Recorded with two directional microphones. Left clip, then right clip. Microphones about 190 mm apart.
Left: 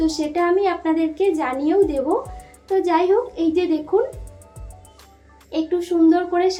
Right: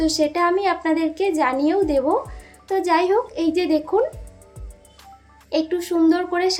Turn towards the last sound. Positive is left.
turn(degrees=-30)  # may be behind; listen again after turning